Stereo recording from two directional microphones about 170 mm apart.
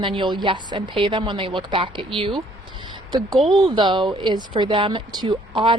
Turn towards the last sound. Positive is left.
turn(degrees=-30)  # may be behind; listen again after turning